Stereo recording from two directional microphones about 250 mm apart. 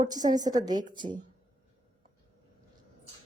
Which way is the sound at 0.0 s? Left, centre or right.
Centre.